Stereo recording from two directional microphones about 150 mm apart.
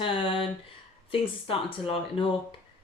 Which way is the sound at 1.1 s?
35° left (ahead or behind).